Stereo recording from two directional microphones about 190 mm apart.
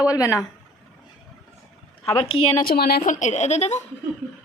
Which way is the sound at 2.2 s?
30° left (ahead or behind).